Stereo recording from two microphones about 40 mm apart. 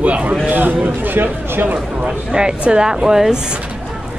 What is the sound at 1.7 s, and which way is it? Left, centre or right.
Speech, right.